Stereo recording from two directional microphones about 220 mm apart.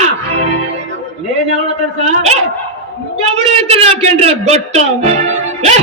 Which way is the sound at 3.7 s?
30° right (ahead or behind).